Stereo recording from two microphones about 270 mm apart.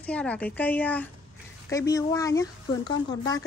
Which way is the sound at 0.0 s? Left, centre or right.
Centre.